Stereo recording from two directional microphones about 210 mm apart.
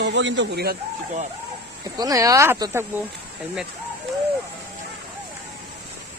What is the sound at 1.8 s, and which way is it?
Speech, 15° right (ahead or behind).